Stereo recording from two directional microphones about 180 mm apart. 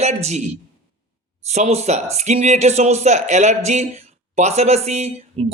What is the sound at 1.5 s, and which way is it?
A man's voice, 40° right (ahead or behind).